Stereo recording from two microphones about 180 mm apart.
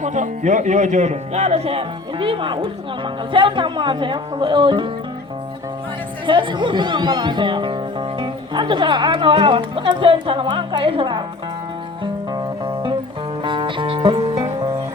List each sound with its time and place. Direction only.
0.0 s speech: 40° right (ahead or behind); by 4.9 s 25° right (ahead or behind)
6.2 s speech: 25° right (ahead or behind)
12.6 s music: 30° right (ahead or behind)